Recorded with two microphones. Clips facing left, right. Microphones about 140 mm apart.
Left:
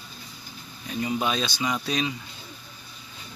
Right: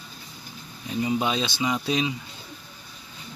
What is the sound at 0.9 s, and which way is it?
Speech, 20° right (ahead or behind).